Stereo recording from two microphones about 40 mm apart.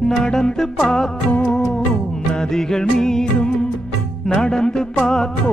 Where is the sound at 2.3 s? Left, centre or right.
Centre.